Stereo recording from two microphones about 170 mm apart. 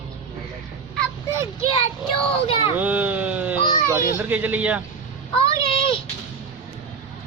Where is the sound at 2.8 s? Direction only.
10° right (ahead or behind).